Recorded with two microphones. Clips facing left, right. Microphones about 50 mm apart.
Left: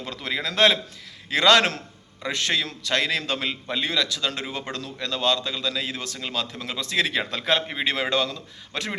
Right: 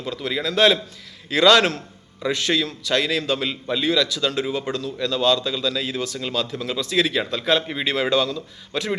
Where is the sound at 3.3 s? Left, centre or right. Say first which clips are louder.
Right 3 dB; left.